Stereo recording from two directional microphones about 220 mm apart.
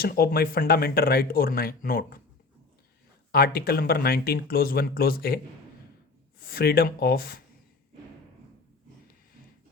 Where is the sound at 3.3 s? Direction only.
45° left (ahead or behind).